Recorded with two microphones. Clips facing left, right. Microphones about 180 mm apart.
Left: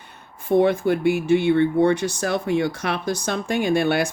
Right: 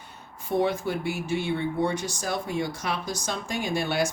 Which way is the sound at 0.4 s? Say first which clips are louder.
Left 8 dB; 55° left (ahead or behind).